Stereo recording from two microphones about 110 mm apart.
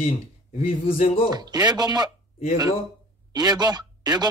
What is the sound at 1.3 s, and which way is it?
Speech, 35° right (ahead or behind).